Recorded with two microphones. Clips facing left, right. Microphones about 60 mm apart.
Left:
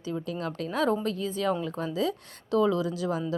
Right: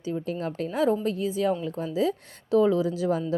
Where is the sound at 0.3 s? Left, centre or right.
Right.